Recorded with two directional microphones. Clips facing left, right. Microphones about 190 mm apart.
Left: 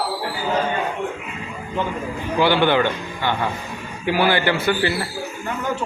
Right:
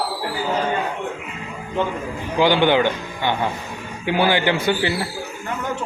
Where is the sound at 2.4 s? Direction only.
15° right (ahead or behind).